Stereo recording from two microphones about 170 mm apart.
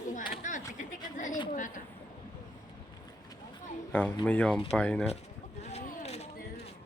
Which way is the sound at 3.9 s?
10° left (ahead or behind).